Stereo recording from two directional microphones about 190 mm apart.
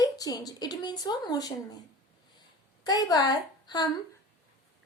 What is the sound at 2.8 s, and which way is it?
A woman's voice, 20° left (ahead or behind).